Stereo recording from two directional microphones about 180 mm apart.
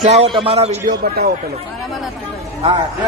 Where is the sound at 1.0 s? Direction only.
60° right (ahead or behind).